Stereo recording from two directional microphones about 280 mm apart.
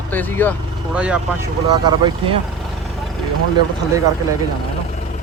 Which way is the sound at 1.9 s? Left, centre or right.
Centre.